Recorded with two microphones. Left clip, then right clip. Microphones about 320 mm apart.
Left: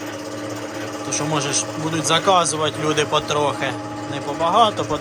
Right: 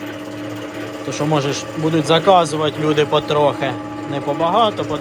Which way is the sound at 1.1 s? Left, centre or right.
Centre.